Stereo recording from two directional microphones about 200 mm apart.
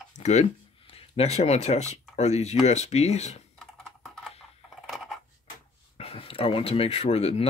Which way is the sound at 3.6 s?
Centre (ahead or behind).